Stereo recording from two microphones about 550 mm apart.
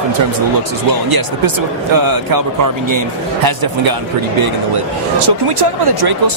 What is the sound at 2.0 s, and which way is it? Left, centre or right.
Speech, right.